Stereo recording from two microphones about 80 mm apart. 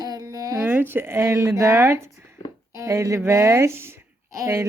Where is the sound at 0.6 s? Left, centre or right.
Right.